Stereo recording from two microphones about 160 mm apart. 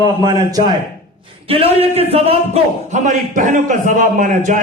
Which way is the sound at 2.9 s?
50° right (ahead or behind).